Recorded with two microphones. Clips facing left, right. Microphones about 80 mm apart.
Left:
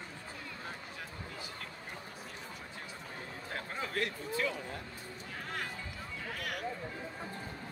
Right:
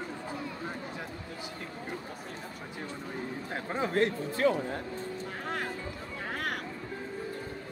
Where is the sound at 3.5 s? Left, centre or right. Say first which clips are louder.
Right 7 dB; right.